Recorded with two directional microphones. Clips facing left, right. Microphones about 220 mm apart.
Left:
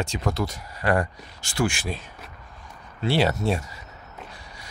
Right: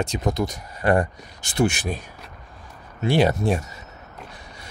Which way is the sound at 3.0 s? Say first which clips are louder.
Right 3 dB; 15° right (ahead or behind).